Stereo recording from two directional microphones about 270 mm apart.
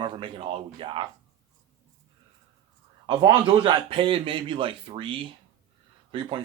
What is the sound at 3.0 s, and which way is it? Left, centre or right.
A man's voice, centre.